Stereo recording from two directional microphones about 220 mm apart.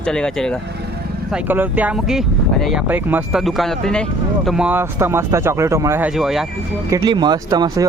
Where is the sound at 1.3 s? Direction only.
10° right (ahead or behind).